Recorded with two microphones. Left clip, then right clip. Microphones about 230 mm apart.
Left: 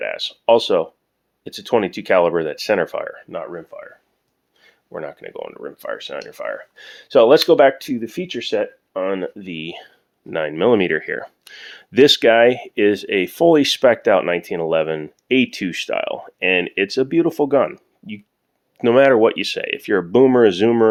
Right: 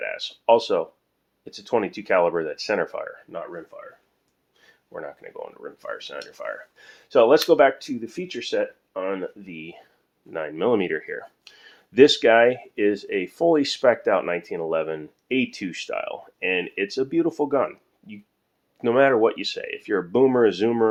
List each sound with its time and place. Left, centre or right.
0.0 s speech: left
4.6 s a sound: left
4.9 s speech: left